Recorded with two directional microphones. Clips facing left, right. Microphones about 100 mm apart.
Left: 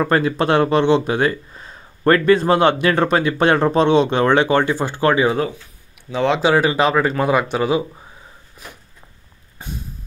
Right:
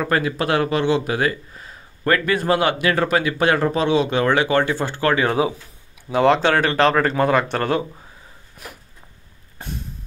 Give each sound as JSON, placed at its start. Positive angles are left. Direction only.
{"t": 0.0, "sound": "speech", "side_deg": 30}
{"t": 6.1, "sound": "speech", "side_deg": 0}
{"t": 9.6, "sound": "a sound", "side_deg": 0}